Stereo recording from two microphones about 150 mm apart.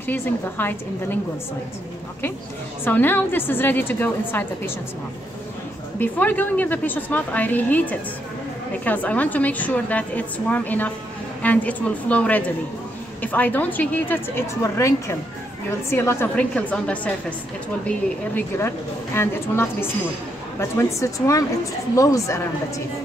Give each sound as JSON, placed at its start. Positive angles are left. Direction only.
{"t": 0.0, "sound": "a woman's voice", "side_deg": 15}
{"t": 2.8, "sound": "a woman's voice", "side_deg": 15}
{"t": 5.9, "sound": "a woman's voice", "side_deg": 10}